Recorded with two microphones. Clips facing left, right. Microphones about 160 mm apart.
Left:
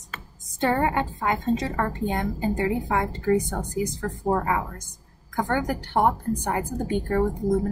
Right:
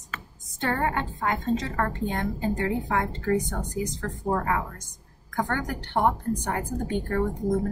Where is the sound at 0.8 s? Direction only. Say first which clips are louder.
Left 3 dB; 10° left (ahead or behind).